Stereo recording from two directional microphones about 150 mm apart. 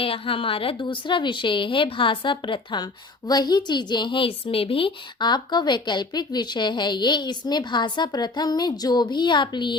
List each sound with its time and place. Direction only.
0.0 s a woman's voice: 35° left (ahead or behind)